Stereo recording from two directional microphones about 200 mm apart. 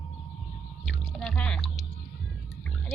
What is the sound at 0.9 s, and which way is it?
Speech, centre (ahead or behind).